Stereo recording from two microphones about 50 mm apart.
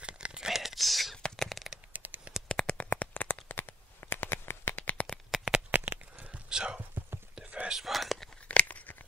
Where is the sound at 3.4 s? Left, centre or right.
Left.